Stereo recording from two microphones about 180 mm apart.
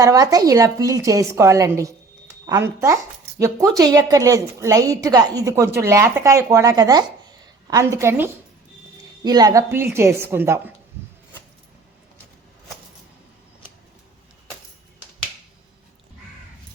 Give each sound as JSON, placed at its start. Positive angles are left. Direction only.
{"t": 0.0, "sound": "a woman's voice", "side_deg": -20}